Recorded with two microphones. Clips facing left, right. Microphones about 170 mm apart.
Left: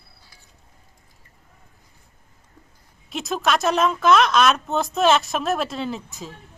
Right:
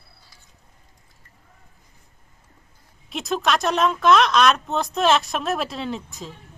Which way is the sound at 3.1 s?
Centre (ahead or behind).